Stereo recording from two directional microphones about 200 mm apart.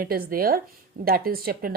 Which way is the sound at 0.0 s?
45° right (ahead or behind).